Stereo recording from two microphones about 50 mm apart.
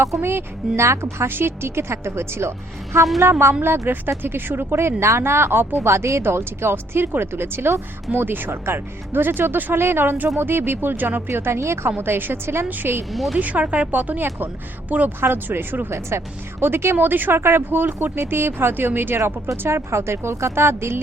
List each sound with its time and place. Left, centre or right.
0.2 s speech: right
0.8 s speech: right
1.3 s a woman's voice: right
5.8 s speech: right
6.2 s speech: right
11.3 s speech: right
11.6 s speech: right
11.9 s speech: right
13.4 s speech: right
15.2 s speech: right
15.9 s speech: right
19.6 s a woman's voice: right